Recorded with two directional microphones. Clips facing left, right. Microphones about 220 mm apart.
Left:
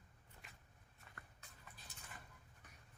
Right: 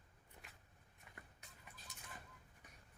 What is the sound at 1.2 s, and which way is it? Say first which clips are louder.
Horse: right 2 dB; 20° right (ahead or behind).